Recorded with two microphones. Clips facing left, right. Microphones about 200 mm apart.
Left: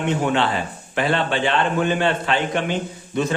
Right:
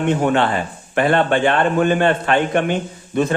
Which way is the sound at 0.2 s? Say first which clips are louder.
Right 3 dB; 50° right (ahead or behind).